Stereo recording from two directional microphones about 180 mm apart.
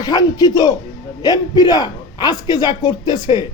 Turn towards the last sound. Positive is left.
turn(degrees=20)  # may be behind; listen again after turning